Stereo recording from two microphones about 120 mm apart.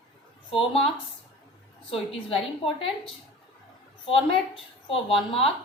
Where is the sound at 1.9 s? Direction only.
50° left (ahead or behind).